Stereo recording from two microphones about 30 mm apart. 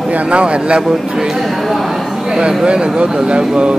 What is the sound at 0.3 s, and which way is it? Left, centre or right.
Speech, right.